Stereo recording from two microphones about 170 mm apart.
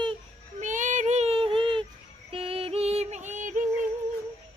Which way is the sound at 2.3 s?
35° right (ahead or behind).